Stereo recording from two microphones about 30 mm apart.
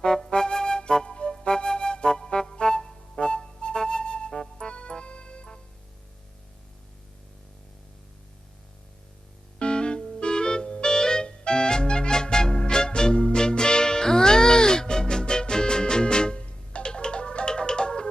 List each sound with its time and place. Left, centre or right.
0.3 s flute: left
1.3 s music: left
9.6 s music: left